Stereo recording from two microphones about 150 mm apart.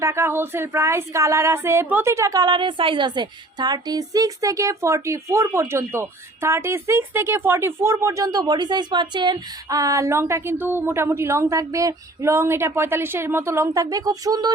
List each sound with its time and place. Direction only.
0.0 s speech: 20° right (ahead or behind)